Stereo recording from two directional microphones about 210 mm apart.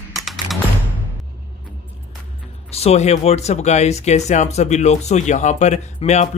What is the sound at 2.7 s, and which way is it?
Speech, 30° left (ahead or behind).